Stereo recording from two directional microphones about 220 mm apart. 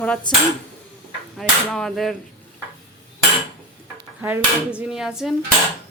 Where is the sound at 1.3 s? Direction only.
Centre (ahead or behind).